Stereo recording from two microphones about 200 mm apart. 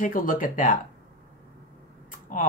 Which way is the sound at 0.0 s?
40° left (ahead or behind).